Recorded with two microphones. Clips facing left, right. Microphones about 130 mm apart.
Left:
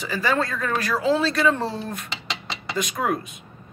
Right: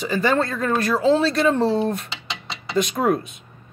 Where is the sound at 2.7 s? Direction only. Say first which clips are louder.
Right 5 dB; 30° right (ahead or behind).